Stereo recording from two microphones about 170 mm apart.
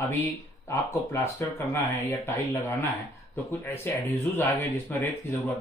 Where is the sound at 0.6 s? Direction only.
15° left (ahead or behind).